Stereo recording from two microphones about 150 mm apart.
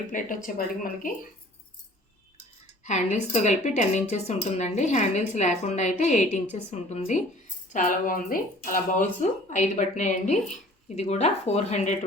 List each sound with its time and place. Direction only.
0.1 s speech: 65° left (ahead or behind)
2.8 s a woman's voice: 50° left (ahead or behind)